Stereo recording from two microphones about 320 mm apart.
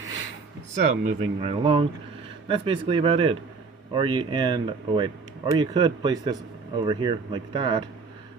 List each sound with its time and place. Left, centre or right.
0.8 s speech: centre